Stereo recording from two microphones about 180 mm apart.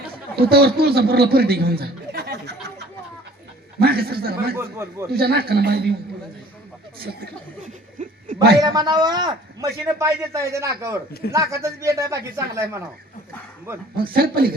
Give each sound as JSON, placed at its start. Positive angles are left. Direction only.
{"t": 0.3, "sound": "a man's voice", "side_deg": -60}
{"t": 4.5, "sound": "speech", "side_deg": -15}
{"t": 5.1, "sound": "a man's voice", "side_deg": -60}
{"t": 7.9, "sound": "a sound", "side_deg": -45}
{"t": 8.6, "sound": "a man's voice", "side_deg": -20}
{"t": 13.9, "sound": "a man's voice", "side_deg": -55}